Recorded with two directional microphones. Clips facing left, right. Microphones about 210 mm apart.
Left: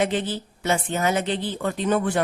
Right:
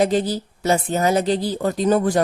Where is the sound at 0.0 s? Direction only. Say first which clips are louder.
Right 5 dB; 40° right (ahead or behind).